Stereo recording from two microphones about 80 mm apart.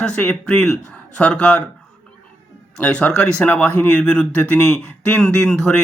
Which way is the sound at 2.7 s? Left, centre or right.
Centre.